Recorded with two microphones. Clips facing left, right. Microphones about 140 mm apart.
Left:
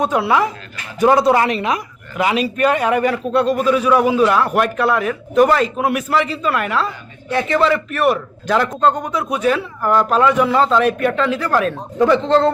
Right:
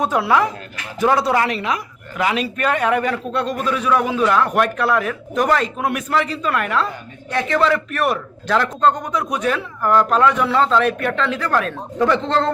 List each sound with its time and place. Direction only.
0.0 s a man's voice: centre (ahead or behind)
1.0 s speech: 20° left (ahead or behind)
2.1 s a man's voice: 10° left (ahead or behind)